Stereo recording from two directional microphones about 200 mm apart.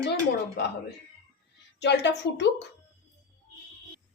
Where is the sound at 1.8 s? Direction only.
60° left (ahead or behind).